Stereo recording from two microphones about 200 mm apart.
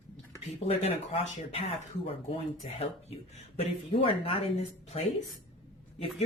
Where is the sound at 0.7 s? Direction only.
30° left (ahead or behind).